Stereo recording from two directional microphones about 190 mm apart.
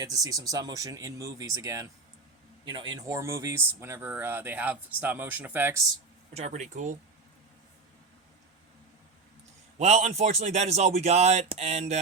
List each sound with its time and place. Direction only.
0.0 s speech: 20° right (ahead or behind)
6.3 s speech: 35° right (ahead or behind)
9.7 s speech: 35° right (ahead or behind)